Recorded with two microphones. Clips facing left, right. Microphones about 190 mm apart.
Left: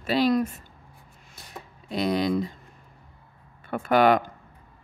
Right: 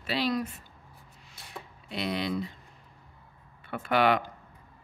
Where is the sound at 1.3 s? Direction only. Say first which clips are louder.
Left 2 dB; 45° left (ahead or behind).